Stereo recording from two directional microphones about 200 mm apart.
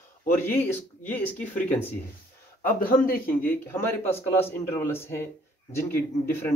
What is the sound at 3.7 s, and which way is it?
Speech, 10° left (ahead or behind).